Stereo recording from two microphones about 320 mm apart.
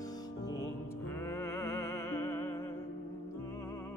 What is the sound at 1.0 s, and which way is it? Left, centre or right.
Music, centre.